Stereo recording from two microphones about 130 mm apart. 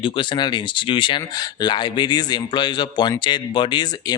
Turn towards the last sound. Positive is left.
turn(degrees=35)  # may be behind; listen again after turning